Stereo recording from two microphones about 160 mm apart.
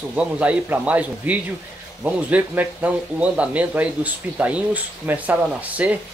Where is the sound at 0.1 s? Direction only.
10° right (ahead or behind).